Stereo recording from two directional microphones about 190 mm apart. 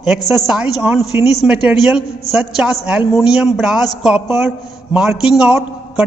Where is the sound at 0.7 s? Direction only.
5° right (ahead or behind).